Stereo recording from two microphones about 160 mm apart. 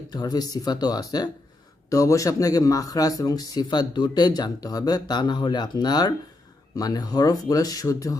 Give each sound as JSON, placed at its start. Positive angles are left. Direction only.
{"t": 0.1, "sound": "a man's voice", "side_deg": 25}